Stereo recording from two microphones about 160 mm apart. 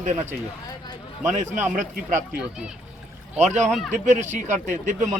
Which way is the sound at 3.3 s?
45° right (ahead or behind).